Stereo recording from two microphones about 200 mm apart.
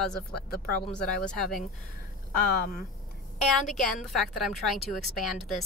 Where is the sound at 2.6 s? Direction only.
50° left (ahead or behind).